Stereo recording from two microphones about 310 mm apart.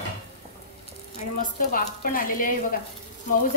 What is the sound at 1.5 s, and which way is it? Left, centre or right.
Speech, left.